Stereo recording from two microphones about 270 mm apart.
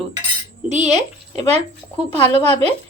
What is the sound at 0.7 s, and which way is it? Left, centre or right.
Speech, right.